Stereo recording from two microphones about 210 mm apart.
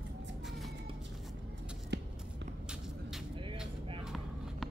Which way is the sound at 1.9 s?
55° right (ahead or behind).